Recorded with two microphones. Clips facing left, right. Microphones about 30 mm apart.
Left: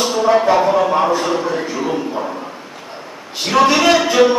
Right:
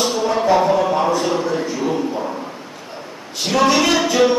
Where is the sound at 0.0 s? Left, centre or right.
Centre.